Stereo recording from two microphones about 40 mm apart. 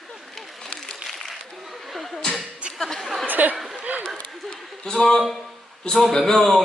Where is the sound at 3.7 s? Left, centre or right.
Right.